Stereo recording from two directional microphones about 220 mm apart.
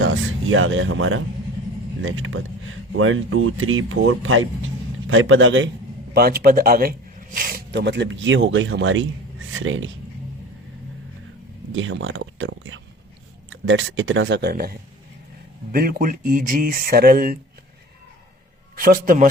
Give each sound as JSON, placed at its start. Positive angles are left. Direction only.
{"t": 0.0, "sound": "speech", "side_deg": -65}
{"t": 6.1, "sound": "speech", "side_deg": -45}
{"t": 11.7, "sound": "speech", "side_deg": -60}
{"t": 18.8, "sound": "speech", "side_deg": -40}